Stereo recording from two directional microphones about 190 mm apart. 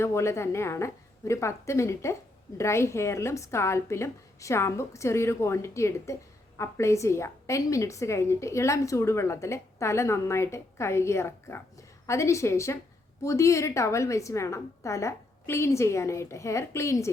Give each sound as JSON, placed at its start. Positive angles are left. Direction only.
{"t": 0.0, "sound": "a woman's voice", "side_deg": 15}